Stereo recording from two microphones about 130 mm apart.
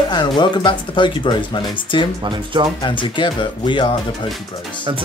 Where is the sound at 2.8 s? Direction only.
40° left (ahead or behind).